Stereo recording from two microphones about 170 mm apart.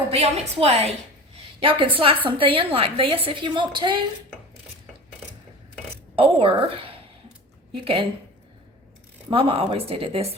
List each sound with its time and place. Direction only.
0.1 s a woman's voice: 35° right (ahead or behind)
2.0 s a woman's voice: 30° right (ahead or behind)
6.1 s a woman's voice: 35° right (ahead or behind)
9.3 s a woman's voice: 30° right (ahead or behind)